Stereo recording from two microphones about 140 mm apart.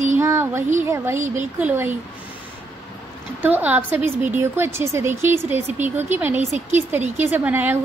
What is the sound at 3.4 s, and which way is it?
A woman's voice, 10° right (ahead or behind).